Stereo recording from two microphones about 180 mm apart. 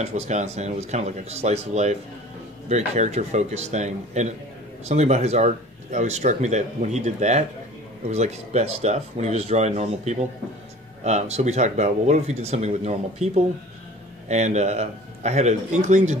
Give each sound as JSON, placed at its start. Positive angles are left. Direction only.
{"t": 0.0, "sound": "speech", "side_deg": -40}